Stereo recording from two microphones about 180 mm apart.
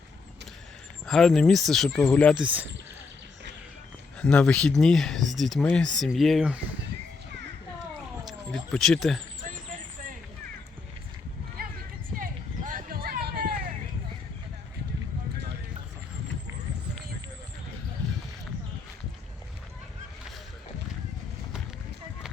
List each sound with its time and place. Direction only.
1.0 s speech: centre (ahead or behind)
2.4 s speech: 10° right (ahead or behind)
4.2 s speech: 5° left (ahead or behind)
8.5 s speech: 5° left (ahead or behind)
11.6 s a sound: 55° right (ahead or behind)